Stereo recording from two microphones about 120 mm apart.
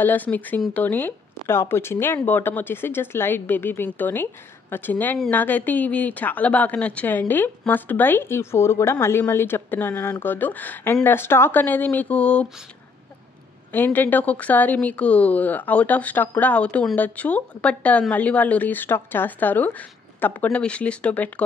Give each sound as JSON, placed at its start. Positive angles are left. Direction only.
{"t": 0.0, "sound": "a woman's voice", "side_deg": 15}
{"t": 13.7, "sound": "a woman's voice", "side_deg": 15}